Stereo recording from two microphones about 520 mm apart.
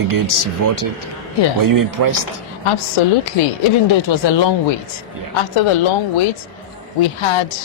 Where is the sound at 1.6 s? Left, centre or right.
Right.